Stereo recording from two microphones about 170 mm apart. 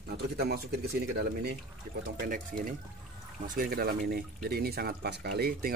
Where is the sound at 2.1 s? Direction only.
55° right (ahead or behind).